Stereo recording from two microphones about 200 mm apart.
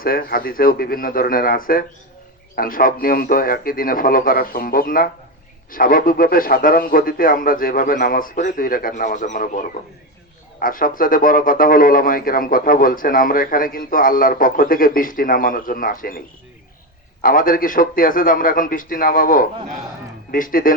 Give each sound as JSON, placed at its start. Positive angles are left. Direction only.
{"t": 0.0, "sound": "speech", "side_deg": 45}
{"t": 17.2, "sound": "speech", "side_deg": 45}